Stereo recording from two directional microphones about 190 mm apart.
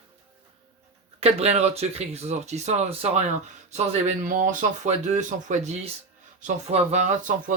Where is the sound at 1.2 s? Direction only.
35° right (ahead or behind).